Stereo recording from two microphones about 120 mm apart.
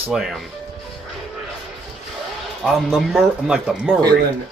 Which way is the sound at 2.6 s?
Centre (ahead or behind).